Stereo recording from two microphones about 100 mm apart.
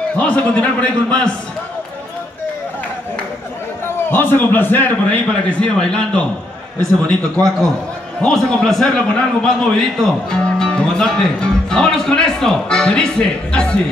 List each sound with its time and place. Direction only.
0.1 s a man's voice: 15° left (ahead or behind)
3.8 s a man's voice: 20° left (ahead or behind)
8.2 s a man's voice: 10° left (ahead or behind)